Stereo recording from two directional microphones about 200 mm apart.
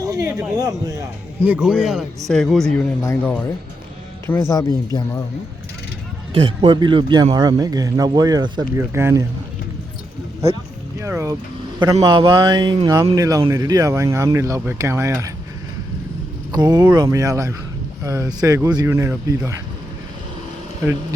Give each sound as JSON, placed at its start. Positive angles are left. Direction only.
{"t": 0.0, "sound": "a sound", "side_deg": -15}
{"t": 0.5, "sound": "a man's voice", "side_deg": -20}
{"t": 6.3, "sound": "a man's voice", "side_deg": -25}
{"t": 11.0, "sound": "a man's voice", "side_deg": -15}
{"t": 16.5, "sound": "a man's voice", "side_deg": -20}